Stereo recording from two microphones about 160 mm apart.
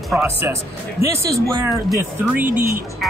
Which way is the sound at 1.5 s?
20° right (ahead or behind).